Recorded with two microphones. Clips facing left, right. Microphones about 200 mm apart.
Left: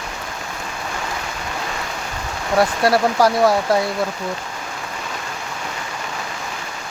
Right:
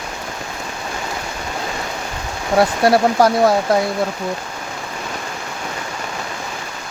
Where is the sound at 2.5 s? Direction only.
25° right (ahead or behind).